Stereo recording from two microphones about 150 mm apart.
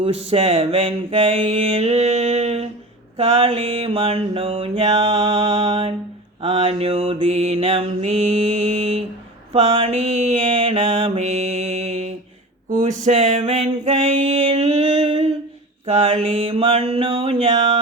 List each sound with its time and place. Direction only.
0.0 s mantra: 40° right (ahead or behind)
12.8 s a sound: 45° right (ahead or behind)
15.9 s mantra: 40° right (ahead or behind)